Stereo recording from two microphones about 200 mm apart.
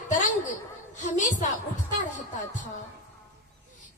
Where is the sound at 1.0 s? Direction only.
40° left (ahead or behind).